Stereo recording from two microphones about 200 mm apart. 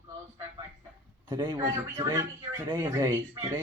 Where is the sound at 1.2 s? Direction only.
25° right (ahead or behind).